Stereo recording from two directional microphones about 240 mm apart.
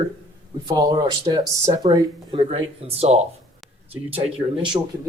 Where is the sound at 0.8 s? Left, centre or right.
Centre.